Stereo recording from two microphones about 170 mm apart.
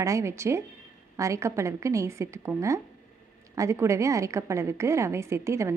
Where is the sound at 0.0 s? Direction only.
15° right (ahead or behind).